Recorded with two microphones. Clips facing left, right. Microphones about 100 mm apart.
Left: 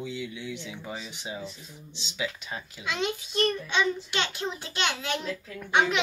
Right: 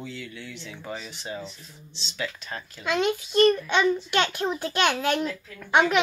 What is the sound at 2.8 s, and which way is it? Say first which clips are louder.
A child's voice: right 6 dB; 50° right (ahead or behind).